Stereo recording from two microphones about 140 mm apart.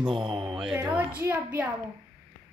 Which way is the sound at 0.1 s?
35° right (ahead or behind).